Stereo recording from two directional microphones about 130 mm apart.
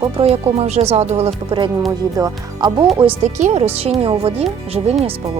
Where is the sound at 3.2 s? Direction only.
55° right (ahead or behind).